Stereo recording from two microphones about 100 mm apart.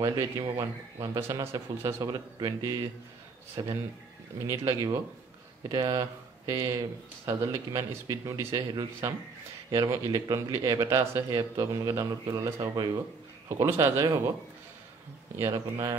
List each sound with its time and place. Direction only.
0.0 s a man's voice: 45° right (ahead or behind); by 2.1 s 30° right (ahead or behind)
2.1 s speech: 45° right (ahead or behind)
3.6 s speech: 50° right (ahead or behind)
4.5 s a man's voice: 35° right (ahead or behind)
10.1 s a man's voice: 45° right (ahead or behind)
11.2 s speech: 45° right (ahead or behind)
11.7 s a man's voice: 35° right (ahead or behind)
13.5 s a man's voice: 25° right (ahead or behind)
13.7 s a man's voice: 35° right (ahead or behind)
15.3 s a man's voice: 30° right (ahead or behind)